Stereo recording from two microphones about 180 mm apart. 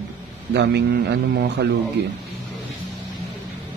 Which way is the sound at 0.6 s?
70° right (ahead or behind).